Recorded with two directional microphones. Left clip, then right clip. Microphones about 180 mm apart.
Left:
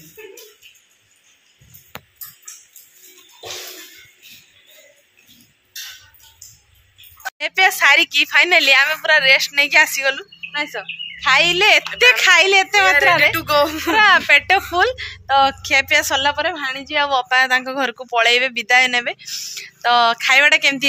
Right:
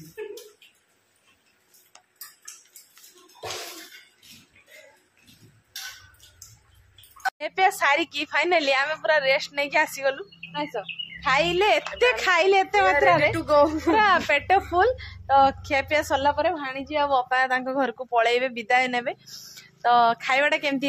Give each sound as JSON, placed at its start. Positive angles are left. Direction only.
{"t": 7.3, "sound": "a woman's voice", "side_deg": 5}
{"t": 13.4, "sound": "a child's voice", "side_deg": -20}
{"t": 13.8, "sound": "a woman's voice", "side_deg": 0}